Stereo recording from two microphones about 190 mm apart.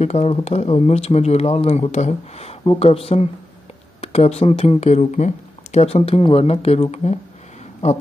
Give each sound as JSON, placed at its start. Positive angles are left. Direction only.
{"t": 0.0, "sound": "speech", "side_deg": 35}